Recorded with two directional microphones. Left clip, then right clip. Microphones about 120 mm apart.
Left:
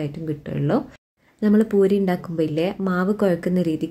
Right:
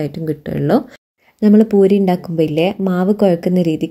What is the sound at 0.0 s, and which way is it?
Speech, 40° right (ahead or behind).